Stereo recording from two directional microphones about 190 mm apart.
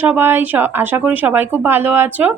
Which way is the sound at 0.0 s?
10° right (ahead or behind).